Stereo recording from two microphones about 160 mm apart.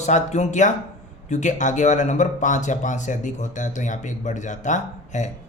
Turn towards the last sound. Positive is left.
turn(degrees=50)  # may be behind; listen again after turning